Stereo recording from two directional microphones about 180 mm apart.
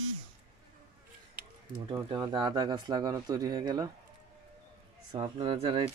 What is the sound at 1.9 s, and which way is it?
Speech, 25° right (ahead or behind).